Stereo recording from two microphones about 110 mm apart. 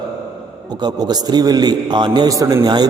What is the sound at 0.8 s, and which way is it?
A man's voice, 40° right (ahead or behind).